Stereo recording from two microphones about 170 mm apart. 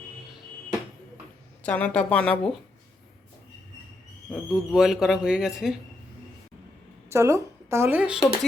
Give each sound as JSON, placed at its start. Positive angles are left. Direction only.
{"t": 1.6, "sound": "speech", "side_deg": 10}
{"t": 4.3, "sound": "speech", "side_deg": -5}
{"t": 7.1, "sound": "speech", "side_deg": -15}